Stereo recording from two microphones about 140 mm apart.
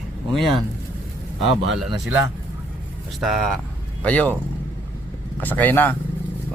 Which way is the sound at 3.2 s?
Centre (ahead or behind).